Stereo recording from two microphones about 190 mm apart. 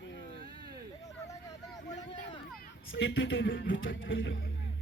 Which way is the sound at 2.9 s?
80° left.